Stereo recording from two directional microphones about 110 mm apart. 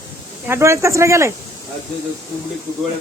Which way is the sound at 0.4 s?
25° right (ahead or behind).